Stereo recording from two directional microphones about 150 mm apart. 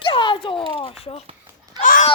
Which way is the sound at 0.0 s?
35° left (ahead or behind).